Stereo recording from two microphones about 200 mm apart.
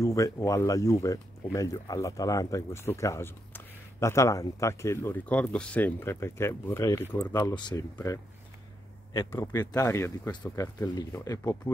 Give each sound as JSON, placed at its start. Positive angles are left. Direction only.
{"t": 0.0, "sound": "speech", "side_deg": 15}
{"t": 9.3, "sound": "speech", "side_deg": 15}